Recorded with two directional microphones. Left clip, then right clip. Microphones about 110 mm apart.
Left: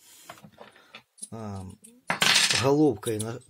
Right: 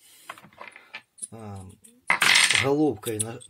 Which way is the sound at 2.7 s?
15° left (ahead or behind).